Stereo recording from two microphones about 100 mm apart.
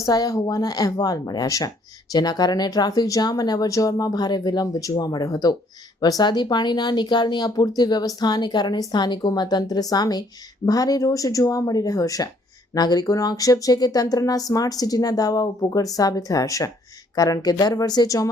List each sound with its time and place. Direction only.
0.0 s a woman's voice: 40° left (ahead or behind)